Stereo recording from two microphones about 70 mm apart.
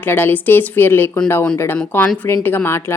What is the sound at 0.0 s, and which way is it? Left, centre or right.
A woman's voice, left.